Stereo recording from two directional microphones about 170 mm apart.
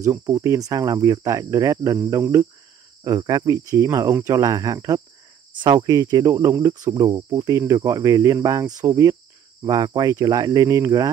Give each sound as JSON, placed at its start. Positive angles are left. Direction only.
{"t": 0.0, "sound": "speech", "side_deg": -20}